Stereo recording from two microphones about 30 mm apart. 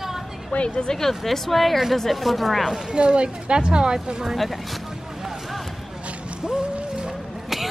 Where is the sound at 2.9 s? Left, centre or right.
Right.